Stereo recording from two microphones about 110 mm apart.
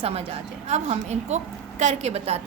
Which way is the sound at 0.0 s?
65° right (ahead or behind).